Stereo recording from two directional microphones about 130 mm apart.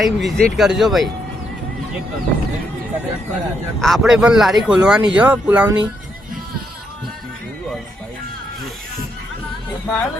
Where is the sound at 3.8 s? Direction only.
Centre (ahead or behind).